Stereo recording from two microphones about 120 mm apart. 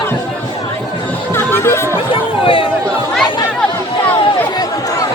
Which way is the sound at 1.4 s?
20° left (ahead or behind).